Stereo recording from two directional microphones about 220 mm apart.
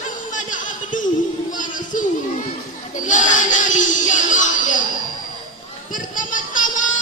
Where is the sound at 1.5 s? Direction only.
35° left (ahead or behind).